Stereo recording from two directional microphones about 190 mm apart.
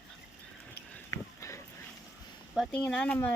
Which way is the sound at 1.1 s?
15° left (ahead or behind).